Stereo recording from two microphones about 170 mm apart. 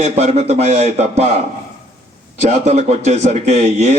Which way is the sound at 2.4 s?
40° right (ahead or behind).